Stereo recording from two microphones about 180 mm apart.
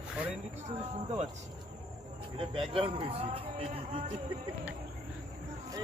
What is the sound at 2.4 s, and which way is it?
Speech, 30° right (ahead or behind).